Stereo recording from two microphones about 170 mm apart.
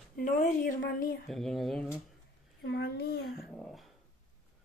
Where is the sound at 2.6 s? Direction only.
85° left.